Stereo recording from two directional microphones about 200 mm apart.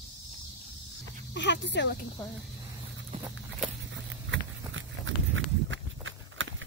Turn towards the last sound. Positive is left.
turn(degrees=-75)  # may be behind; listen again after turning